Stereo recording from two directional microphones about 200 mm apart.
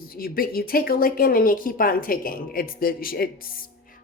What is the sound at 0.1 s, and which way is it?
A woman's voice, 45° left (ahead or behind).